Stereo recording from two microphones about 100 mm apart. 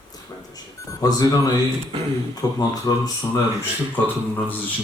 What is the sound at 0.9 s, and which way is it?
Speech, 40° left (ahead or behind).